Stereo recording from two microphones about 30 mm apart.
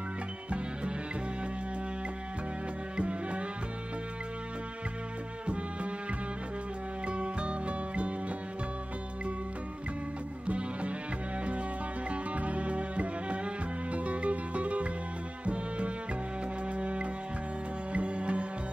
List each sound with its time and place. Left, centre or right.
3.0 s music: right
7.1 s music: right
10.4 s music: right
12.1 s music: right